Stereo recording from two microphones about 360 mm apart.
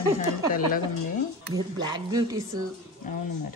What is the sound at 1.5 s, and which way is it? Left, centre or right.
Speech, centre.